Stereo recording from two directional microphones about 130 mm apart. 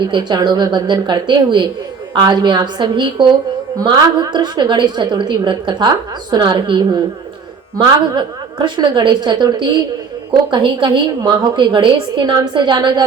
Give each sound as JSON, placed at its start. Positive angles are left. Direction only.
{"t": 0.0, "sound": "a woman's voice", "side_deg": -35}